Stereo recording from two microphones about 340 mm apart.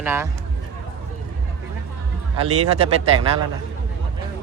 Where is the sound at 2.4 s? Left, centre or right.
Centre.